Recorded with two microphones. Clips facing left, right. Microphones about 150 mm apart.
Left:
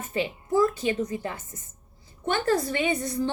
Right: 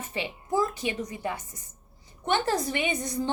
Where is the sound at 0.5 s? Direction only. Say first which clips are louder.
Left 4 dB; 15° right (ahead or behind).